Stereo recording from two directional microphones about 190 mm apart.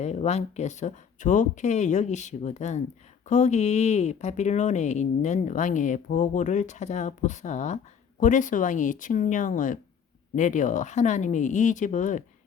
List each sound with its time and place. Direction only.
0.0 s a woman's voice: 35° left (ahead or behind)